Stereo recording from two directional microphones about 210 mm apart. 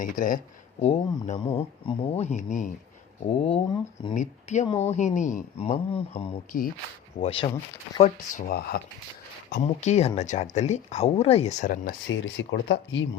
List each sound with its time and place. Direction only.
0.0 s speech: 40° left (ahead or behind)
0.8 s speech: 30° left (ahead or behind)
4.1 s speech: 35° left (ahead or behind)
4.6 s speech: 15° left (ahead or behind)
4.9 s speech: 35° left (ahead or behind)
8.4 s speech: 45° left (ahead or behind)
9.6 s speech: 30° left (ahead or behind)
12.0 s speech: 60° left (ahead or behind)